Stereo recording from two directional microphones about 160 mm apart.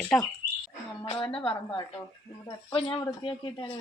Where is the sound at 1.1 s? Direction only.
30° left (ahead or behind).